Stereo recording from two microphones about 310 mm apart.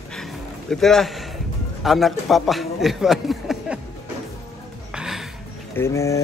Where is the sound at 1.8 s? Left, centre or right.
Centre.